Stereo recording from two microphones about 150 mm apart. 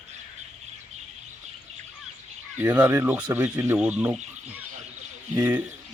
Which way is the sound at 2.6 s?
15° right (ahead or behind).